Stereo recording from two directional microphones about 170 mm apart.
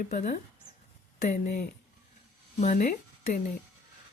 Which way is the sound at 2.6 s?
50° left (ahead or behind).